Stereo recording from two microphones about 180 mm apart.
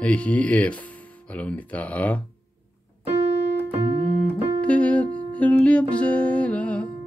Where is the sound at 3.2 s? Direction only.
80° left.